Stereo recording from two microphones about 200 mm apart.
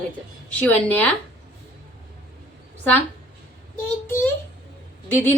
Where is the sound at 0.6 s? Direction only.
10° left (ahead or behind).